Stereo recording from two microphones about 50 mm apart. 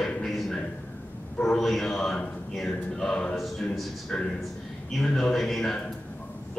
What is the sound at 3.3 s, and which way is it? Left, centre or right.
Speech, centre.